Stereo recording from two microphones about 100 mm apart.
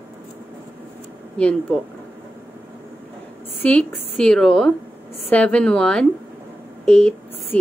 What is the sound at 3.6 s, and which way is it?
A woman's voice, 10° left (ahead or behind).